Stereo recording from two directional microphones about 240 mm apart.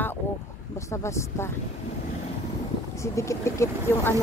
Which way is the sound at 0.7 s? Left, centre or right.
Centre.